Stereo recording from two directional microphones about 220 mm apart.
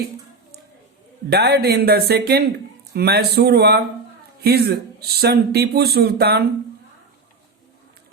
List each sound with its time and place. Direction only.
1.3 s speech: 45° right (ahead or behind)